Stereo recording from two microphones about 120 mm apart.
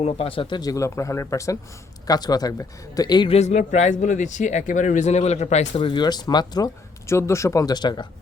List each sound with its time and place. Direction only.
0.0 s speech: 55° left (ahead or behind)
0.6 s speech: 25° left (ahead or behind)
3.2 s speech: 65° left (ahead or behind)
5.9 s speech: 35° left (ahead or behind)
7.1 s speech: 25° left (ahead or behind)